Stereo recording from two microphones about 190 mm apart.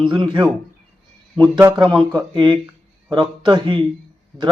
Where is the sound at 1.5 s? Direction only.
20° right (ahead or behind).